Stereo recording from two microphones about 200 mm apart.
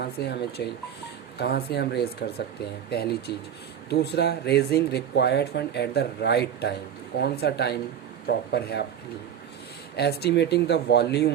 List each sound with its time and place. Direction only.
0.0 s speech: 55° left (ahead or behind)
9.9 s speech: 55° left (ahead or behind)